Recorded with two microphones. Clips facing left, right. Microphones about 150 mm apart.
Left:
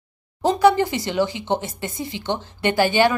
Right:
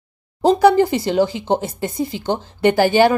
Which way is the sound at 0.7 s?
40° right (ahead or behind).